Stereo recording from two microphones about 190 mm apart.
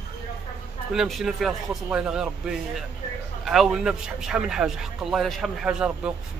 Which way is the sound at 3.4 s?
Centre (ahead or behind).